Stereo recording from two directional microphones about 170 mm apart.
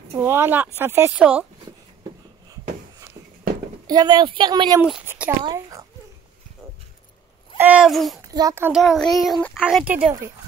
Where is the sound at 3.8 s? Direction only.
25° right (ahead or behind).